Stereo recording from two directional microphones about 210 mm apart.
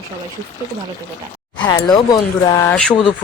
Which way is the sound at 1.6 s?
20° left (ahead or behind).